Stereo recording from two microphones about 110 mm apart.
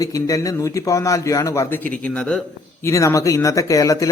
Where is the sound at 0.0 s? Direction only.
30° left (ahead or behind).